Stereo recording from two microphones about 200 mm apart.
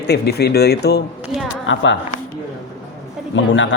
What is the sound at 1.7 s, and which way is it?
Speech, 70° left (ahead or behind).